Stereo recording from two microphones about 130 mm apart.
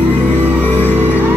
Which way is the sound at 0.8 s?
15° right (ahead or behind).